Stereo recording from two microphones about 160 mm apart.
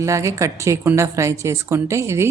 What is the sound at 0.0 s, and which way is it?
A woman's voice, 20° right (ahead or behind).